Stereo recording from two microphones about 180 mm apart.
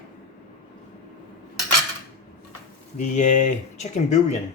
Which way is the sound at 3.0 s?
40° left (ahead or behind).